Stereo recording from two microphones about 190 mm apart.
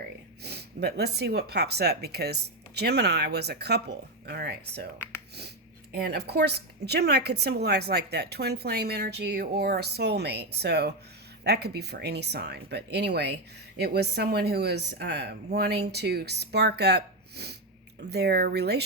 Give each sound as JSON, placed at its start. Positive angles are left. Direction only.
{"t": 0.4, "sound": "a woman's voice", "side_deg": -60}
{"t": 5.9, "sound": "a woman's voice", "side_deg": -55}